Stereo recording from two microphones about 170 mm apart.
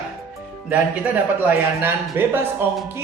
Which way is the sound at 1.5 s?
10° right (ahead or behind).